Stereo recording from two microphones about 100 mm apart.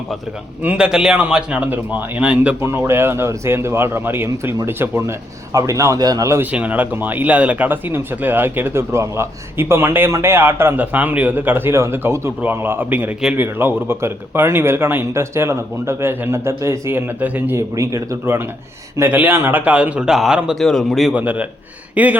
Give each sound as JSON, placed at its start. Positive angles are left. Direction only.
{"t": 0.6, "sound": "a man's voice", "side_deg": -10}
{"t": 2.6, "sound": "a man's voice", "side_deg": -25}
{"t": 6.4, "sound": "speech", "side_deg": -15}
{"t": 17.2, "sound": "a man's voice", "side_deg": -15}
{"t": 17.7, "sound": "a man's voice", "side_deg": -30}
{"t": 21.1, "sound": "a man's voice", "side_deg": -15}